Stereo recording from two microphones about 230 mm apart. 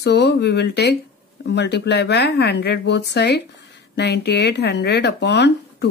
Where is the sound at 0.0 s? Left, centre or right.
Left.